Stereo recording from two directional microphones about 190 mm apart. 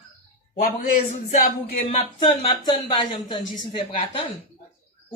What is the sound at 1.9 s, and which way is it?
Speech, 30° left (ahead or behind).